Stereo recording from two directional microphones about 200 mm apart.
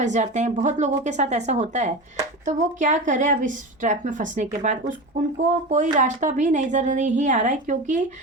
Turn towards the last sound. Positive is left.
turn(degrees=-40)  # may be behind; listen again after turning